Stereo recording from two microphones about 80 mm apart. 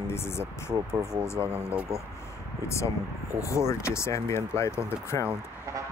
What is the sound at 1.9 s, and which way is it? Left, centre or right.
Speech, right.